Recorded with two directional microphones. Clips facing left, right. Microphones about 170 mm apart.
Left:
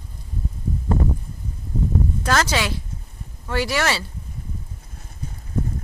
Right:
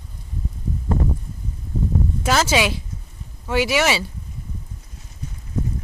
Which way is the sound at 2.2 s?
10° right (ahead or behind).